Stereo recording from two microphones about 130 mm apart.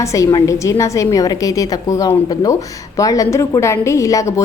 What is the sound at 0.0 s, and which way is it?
A woman's voice, 25° left (ahead or behind).